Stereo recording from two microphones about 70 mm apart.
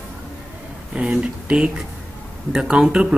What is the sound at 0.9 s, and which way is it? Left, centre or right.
Speech, centre.